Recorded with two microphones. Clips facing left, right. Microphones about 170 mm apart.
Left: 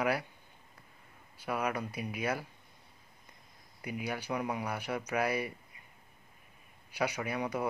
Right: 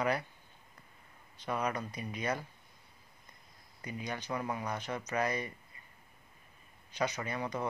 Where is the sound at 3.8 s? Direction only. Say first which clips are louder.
Left 3 dB; 10° left (ahead or behind).